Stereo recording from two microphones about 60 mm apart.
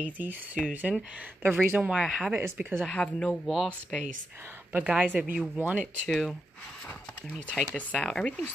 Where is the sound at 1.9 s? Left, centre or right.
Centre.